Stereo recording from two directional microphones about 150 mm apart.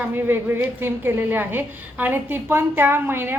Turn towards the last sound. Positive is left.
turn(degrees=-15)  # may be behind; listen again after turning